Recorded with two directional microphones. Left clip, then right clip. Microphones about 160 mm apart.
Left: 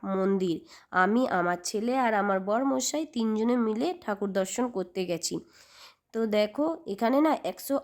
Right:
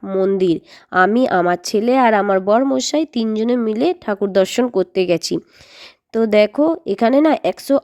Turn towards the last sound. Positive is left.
turn(degrees=-45)  # may be behind; listen again after turning